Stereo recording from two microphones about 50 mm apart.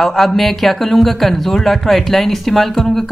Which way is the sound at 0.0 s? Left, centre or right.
Centre.